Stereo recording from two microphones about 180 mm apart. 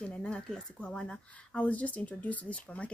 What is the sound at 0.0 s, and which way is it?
Speech, 5° left (ahead or behind).